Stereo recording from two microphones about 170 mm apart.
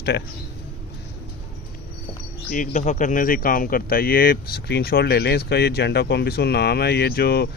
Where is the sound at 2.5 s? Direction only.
50° left (ahead or behind); by 7.4 s 65° left (ahead or behind).